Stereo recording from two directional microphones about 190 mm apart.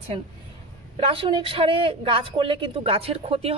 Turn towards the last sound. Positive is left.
turn(degrees=-30)  # may be behind; listen again after turning